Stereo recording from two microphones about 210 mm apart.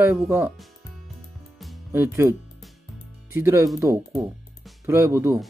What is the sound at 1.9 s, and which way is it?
Speech, 10° right (ahead or behind).